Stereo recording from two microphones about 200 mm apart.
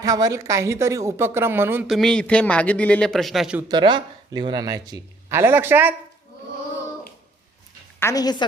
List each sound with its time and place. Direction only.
0.0 s speech: 20° right (ahead or behind); by 3.6 s centre (ahead or behind)
3.7 s speech: 20° right (ahead or behind)
7.9 s a woman's voice: 15° left (ahead or behind)